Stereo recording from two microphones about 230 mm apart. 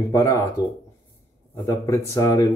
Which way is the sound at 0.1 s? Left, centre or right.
Centre.